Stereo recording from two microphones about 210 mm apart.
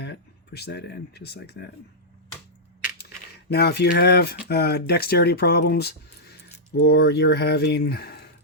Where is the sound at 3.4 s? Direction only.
50° left (ahead or behind).